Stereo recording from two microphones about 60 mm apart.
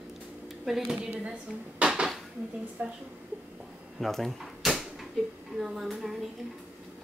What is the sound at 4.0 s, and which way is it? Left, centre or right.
Speech, centre.